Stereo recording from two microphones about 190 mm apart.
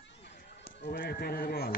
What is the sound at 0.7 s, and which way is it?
A man's voice, 55° left (ahead or behind).